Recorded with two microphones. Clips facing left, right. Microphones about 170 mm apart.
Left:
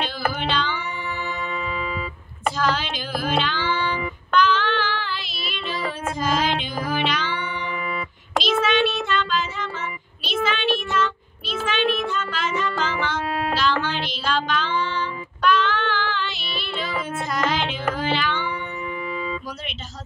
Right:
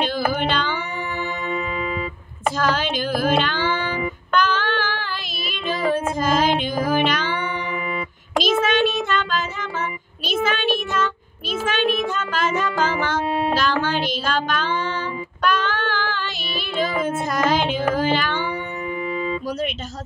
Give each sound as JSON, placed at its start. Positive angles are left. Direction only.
{"t": 0.0, "sound": "music", "side_deg": -50}
{"t": 2.5, "sound": "child singing", "side_deg": -50}
{"t": 5.9, "sound": "music", "side_deg": -45}
{"t": 8.4, "sound": "child singing", "side_deg": -45}
{"t": 12.0, "sound": "music", "side_deg": -45}
{"t": 13.6, "sound": "child singing", "side_deg": -45}